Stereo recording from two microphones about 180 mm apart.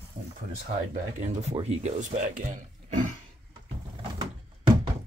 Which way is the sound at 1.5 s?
35° right (ahead or behind).